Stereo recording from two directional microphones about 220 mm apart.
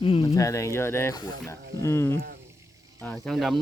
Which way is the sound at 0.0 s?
25° left (ahead or behind).